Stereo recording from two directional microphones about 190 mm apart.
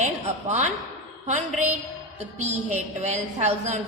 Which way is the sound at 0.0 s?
35° right (ahead or behind).